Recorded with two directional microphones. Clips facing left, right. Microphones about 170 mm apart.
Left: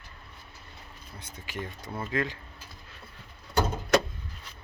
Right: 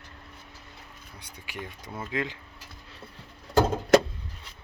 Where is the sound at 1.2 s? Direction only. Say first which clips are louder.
Left 2 dB; 10° right (ahead or behind).